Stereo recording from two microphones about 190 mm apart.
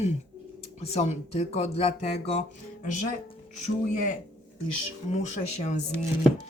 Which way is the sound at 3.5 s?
40° left (ahead or behind).